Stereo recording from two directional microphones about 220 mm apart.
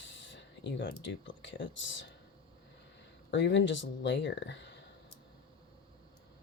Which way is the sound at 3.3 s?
55° left (ahead or behind).